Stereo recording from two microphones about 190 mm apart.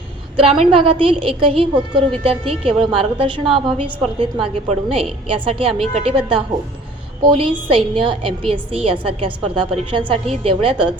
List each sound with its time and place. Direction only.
0.3 s a woman's voice: 30° right (ahead or behind)